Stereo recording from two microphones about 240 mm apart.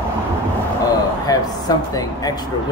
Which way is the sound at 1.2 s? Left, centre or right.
Centre.